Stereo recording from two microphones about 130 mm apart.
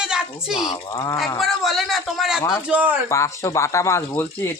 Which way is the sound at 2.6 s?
10° right (ahead or behind).